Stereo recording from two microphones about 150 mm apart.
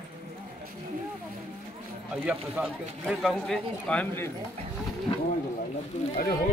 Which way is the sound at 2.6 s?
15° right (ahead or behind).